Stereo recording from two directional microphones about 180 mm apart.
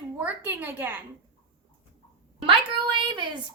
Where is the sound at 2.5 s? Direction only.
25° right (ahead or behind).